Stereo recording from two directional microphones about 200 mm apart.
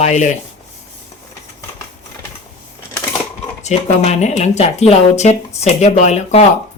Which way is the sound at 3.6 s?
35° left (ahead or behind).